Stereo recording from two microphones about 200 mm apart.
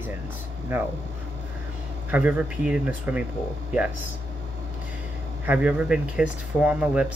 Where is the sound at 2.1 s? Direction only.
5° right (ahead or behind).